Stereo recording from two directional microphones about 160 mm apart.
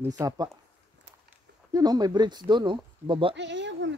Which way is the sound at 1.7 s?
25° right (ahead or behind).